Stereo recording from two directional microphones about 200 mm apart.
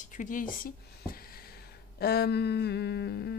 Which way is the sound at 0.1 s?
40° left (ahead or behind).